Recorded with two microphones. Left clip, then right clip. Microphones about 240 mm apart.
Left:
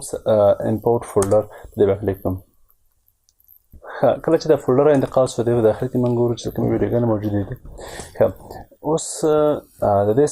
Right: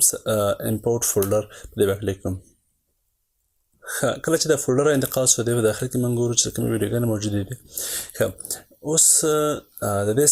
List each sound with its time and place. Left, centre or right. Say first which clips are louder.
0.3 s speech: left 9 dB; right
3.8 s speech: left 6 dB; right